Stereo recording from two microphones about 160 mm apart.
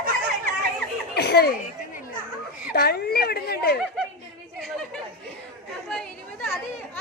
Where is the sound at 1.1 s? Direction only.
90° left.